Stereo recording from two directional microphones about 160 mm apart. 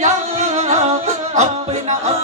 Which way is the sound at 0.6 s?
50° right (ahead or behind).